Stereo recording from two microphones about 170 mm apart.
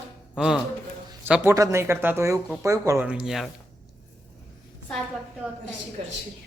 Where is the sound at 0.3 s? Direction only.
5° right (ahead or behind).